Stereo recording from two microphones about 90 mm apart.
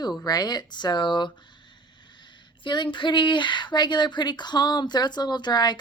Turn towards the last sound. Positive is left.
turn(degrees=50)  # may be behind; listen again after turning